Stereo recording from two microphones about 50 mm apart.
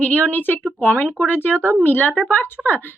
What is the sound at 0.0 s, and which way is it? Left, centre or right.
Speech, left.